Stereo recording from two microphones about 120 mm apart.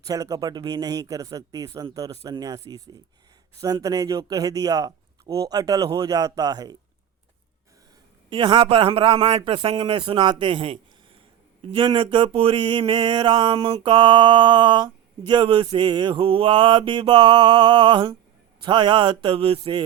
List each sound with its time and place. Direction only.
0.1 s mantra: 30° right (ahead or behind)
3.6 s speech: 30° right (ahead or behind)
5.3 s mantra: 30° right (ahead or behind)
8.3 s a man's voice: 45° right (ahead or behind)
11.7 s mantra: 45° right (ahead or behind)
18.6 s a man's voice: 40° right (ahead or behind)